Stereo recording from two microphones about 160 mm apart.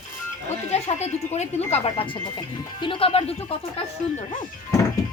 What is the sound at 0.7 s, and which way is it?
Speech, 40° left (ahead or behind).